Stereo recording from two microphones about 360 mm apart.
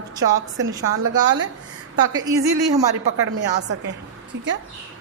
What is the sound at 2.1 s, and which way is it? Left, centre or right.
Speech, centre.